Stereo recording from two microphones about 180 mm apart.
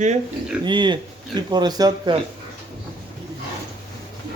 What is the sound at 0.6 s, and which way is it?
A man's voice, 25° right (ahead or behind).